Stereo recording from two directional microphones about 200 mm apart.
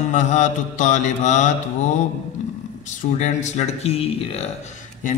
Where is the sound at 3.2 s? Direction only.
35° left (ahead or behind).